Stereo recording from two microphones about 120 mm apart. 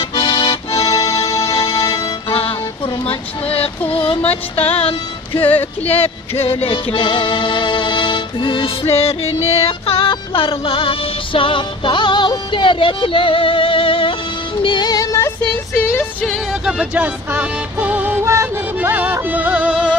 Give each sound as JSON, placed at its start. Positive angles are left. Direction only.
{"t": 0.1, "sound": "accordion", "side_deg": 45}
{"t": 0.7, "sound": "music", "side_deg": 30}
{"t": 1.9, "sound": "music", "side_deg": 50}
{"t": 5.4, "sound": "music", "side_deg": 15}
{"t": 5.9, "sound": "speech", "side_deg": 55}
{"t": 6.6, "sound": "music", "side_deg": 45}
{"t": 14.6, "sound": "music", "side_deg": 40}
{"t": 15.1, "sound": "speech", "side_deg": 20}
{"t": 16.3, "sound": "speech", "side_deg": -5}
{"t": 19.1, "sound": "music", "side_deg": -15}